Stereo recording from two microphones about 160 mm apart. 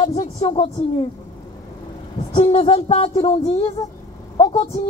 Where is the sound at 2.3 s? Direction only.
35° left (ahead or behind).